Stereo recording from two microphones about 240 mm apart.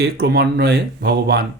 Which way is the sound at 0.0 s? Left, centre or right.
Right.